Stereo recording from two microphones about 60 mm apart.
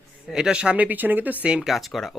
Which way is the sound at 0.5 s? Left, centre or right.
Centre.